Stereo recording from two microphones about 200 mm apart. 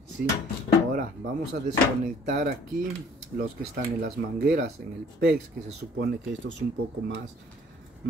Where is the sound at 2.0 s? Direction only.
50° right (ahead or behind).